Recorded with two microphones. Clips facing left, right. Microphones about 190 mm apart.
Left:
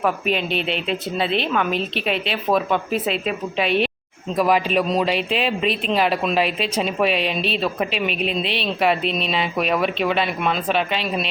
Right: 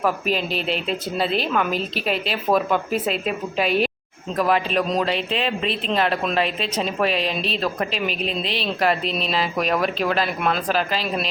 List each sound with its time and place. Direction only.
0.0 s a woman's voice: centre (ahead or behind)
7.2 s a woman's voice: 35° right (ahead or behind)
7.5 s a woman's voice: 5° left (ahead or behind)
8.1 s a woman's voice: 35° right (ahead or behind)
8.5 s a woman's voice: centre (ahead or behind)